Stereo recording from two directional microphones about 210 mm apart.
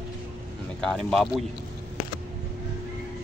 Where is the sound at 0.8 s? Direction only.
5° left (ahead or behind).